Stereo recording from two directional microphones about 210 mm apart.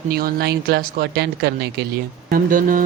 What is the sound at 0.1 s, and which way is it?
Speech, 45° right (ahead or behind).